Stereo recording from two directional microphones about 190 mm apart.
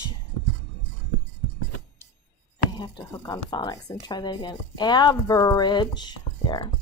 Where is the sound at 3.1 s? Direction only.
20° left (ahead or behind).